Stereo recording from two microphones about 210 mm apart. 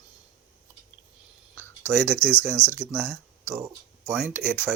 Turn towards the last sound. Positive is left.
turn(degrees=-10)  # may be behind; listen again after turning